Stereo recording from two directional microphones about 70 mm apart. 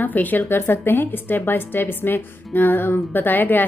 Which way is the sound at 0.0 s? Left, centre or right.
Left.